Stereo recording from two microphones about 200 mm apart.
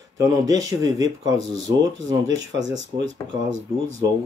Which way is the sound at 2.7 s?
65° right (ahead or behind).